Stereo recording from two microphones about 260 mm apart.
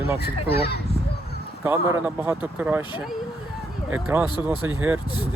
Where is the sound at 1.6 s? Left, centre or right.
Centre.